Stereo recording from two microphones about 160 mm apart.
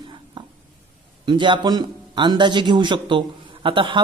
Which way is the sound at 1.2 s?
30° right (ahead or behind).